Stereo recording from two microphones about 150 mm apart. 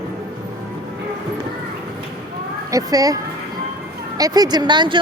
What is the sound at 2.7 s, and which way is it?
Speech, 25° right (ahead or behind).